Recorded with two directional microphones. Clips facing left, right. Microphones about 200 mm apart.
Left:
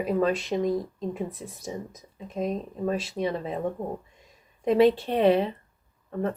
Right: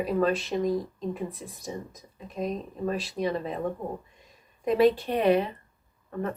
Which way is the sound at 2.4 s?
25° left (ahead or behind).